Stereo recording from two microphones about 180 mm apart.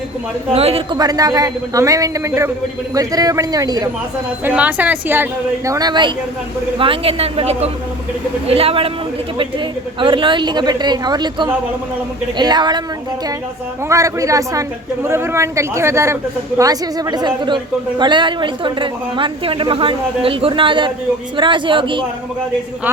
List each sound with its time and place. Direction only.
0.5 s a woman's voice: 35° right (ahead or behind)
0.9 s a woman's voice: 20° right (ahead or behind)
4.4 s a woman's voice: 10° right (ahead or behind); by 8.9 s 30° right (ahead or behind)
10.0 s a woman's voice: 25° right (ahead or behind)
13.8 s a woman's voice: 15° right (ahead or behind)